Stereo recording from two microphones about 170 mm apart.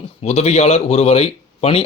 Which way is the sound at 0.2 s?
40° left (ahead or behind).